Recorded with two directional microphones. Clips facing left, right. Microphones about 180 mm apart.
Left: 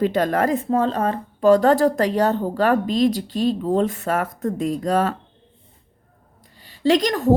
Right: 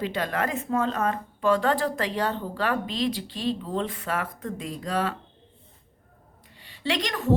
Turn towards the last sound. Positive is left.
turn(degrees=40)  # may be behind; listen again after turning